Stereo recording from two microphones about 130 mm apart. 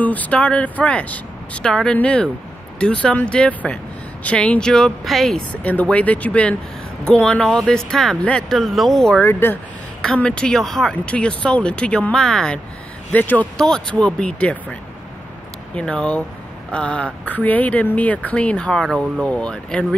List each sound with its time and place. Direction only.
0.0 s speech: 10° left (ahead or behind)
9.2 s speech: 15° left (ahead or behind)